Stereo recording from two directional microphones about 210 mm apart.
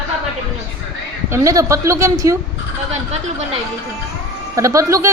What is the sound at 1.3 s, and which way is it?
Speech, 15° right (ahead or behind).